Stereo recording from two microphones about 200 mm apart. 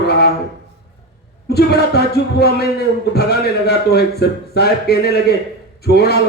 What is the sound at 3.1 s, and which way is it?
A man's voice, 55° left (ahead or behind).